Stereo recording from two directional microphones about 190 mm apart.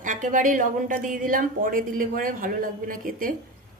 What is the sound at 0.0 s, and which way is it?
A woman's voice, 45° right (ahead or behind).